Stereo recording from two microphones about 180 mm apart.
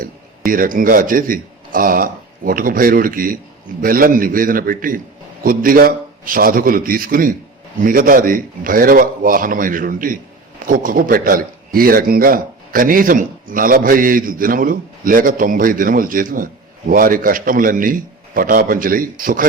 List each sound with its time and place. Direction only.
0.0 s a man's voice: 50° right (ahead or behind)